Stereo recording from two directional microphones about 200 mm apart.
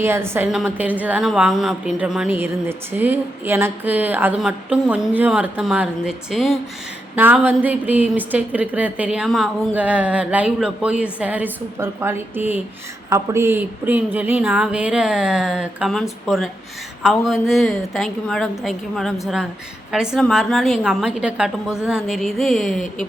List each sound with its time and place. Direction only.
0.0 s a woman's voice: 10° right (ahead or behind)